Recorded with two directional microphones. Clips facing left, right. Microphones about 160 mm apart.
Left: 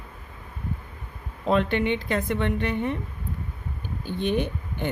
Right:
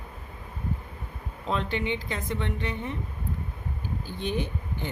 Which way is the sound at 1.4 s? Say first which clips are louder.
Left 6 dB; 60° left (ahead or behind).